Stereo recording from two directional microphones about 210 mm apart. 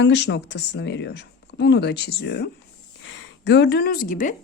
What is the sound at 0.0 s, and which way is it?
A woman's voice, 55° left (ahead or behind).